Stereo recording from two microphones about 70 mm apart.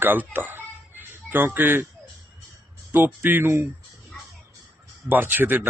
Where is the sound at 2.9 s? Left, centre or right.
Right.